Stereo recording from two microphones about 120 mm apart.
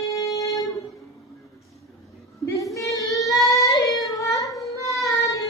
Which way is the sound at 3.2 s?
Centre (ahead or behind).